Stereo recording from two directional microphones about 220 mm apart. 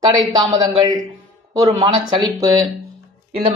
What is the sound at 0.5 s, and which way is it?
Speech, 20° right (ahead or behind).